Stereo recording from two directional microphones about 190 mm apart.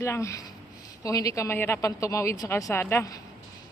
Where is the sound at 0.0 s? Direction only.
15° left (ahead or behind).